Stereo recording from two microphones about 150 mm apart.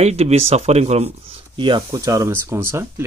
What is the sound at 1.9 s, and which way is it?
Speech, 20° right (ahead or behind).